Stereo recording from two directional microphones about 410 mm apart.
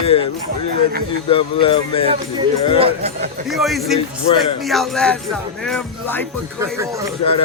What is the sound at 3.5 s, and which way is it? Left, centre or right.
Speech, centre.